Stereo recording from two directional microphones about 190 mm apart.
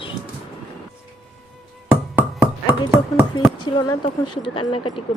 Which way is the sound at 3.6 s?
25° left (ahead or behind).